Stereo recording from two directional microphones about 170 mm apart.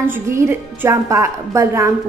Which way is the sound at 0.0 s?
15° right (ahead or behind).